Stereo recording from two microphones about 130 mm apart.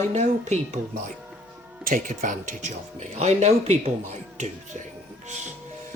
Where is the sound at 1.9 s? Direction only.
85° right.